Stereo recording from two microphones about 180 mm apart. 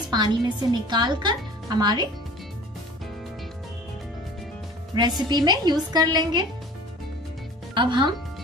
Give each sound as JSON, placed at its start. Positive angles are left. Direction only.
{"t": 0.1, "sound": "a woman's voice", "side_deg": -25}
{"t": 4.9, "sound": "a woman's voice", "side_deg": -25}
{"t": 7.7, "sound": "speech", "side_deg": -25}